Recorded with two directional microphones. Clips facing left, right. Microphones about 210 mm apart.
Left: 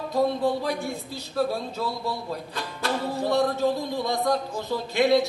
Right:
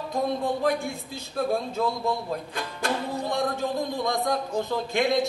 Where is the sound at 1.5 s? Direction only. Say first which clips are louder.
Right 3 dB; 50° right (ahead or behind).